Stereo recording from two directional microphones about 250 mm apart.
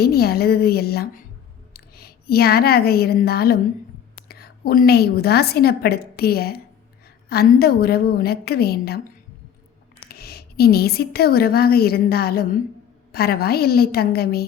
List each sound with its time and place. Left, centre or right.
0.0 s a woman's voice: left
10.1 s a woman's voice: left